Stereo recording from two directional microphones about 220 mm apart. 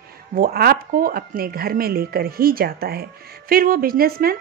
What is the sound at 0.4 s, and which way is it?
Speech, 45° right (ahead or behind).